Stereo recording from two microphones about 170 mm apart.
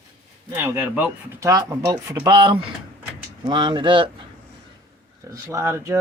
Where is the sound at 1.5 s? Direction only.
20° right (ahead or behind).